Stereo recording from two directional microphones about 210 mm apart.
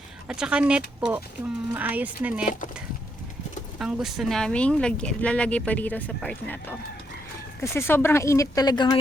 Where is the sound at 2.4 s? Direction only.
40° left (ahead or behind).